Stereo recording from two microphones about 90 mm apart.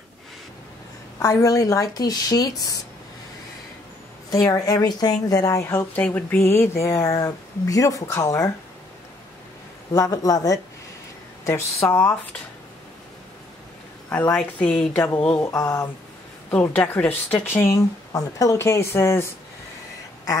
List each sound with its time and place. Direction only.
1.2 s speech: 35° left (ahead or behind)
4.3 s speech: 40° left (ahead or behind)
5.9 s speech: 20° left (ahead or behind); by 8.5 s 35° left (ahead or behind)
9.9 s speech: 40° left (ahead or behind)
11.4 s speech: 30° left (ahead or behind)
14.3 s speech: 15° left (ahead or behind)
15.4 s speech: 40° left (ahead or behind)
16.7 s speech: 20° left (ahead or behind)
18.1 s speech: 40° left (ahead or behind)